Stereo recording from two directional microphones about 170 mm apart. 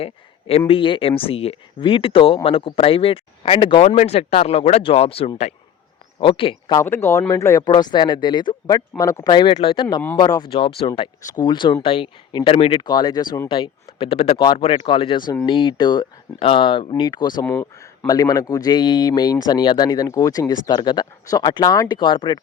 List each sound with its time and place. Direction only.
0.0 s speech: 35° left (ahead or behind)
6.8 s speech: 15° left (ahead or behind)
17.4 s speech: 10° left (ahead or behind)
18.1 s speech: 20° left (ahead or behind)